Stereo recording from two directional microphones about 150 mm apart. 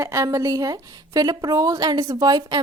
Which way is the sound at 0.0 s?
20° right (ahead or behind).